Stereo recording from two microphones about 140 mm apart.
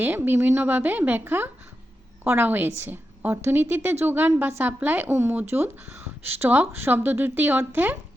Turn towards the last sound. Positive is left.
turn(degrees=-15)  # may be behind; listen again after turning